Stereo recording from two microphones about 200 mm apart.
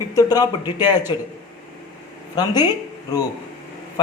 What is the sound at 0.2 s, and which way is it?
Speech, 20° left (ahead or behind).